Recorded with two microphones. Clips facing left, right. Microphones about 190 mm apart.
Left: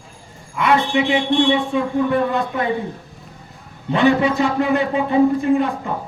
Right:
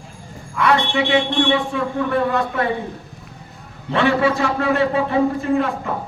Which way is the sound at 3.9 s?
20° left (ahead or behind).